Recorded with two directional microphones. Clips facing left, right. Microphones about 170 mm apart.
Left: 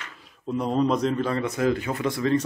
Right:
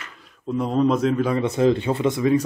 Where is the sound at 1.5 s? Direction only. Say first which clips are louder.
Right 5 dB; 25° right (ahead or behind).